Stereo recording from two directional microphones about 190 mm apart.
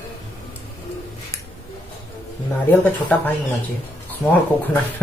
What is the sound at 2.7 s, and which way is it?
Speech, 10° left (ahead or behind).